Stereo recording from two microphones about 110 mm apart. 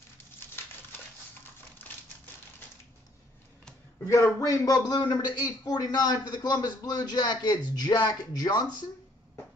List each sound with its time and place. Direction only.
4.0 s a man's voice: 30° left (ahead or behind)